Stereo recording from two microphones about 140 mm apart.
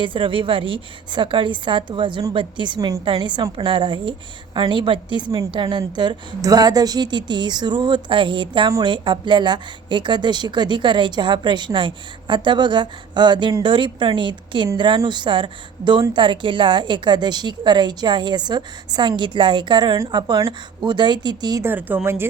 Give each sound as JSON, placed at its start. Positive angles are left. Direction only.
{"t": 0.0, "sound": "a woman's voice", "side_deg": -35}
{"t": 21.6, "sound": "a woman's voice", "side_deg": -15}